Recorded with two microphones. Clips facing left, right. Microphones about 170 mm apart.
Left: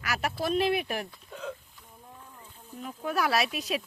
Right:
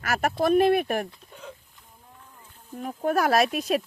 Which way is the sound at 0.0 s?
50° right (ahead or behind).